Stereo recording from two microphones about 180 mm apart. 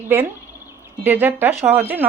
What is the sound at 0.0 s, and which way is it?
Speech, 10° right (ahead or behind).